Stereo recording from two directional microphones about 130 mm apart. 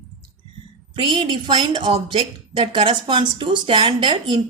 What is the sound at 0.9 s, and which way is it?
A woman's voice, 40° right (ahead or behind).